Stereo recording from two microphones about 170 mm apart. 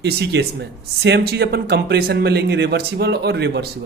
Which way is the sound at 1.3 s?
70° right (ahead or behind).